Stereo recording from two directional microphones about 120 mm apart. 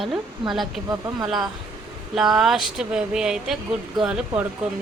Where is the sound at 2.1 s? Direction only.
5° right (ahead or behind).